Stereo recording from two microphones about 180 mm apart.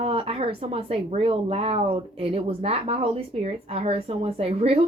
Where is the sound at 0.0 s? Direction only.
30° right (ahead or behind).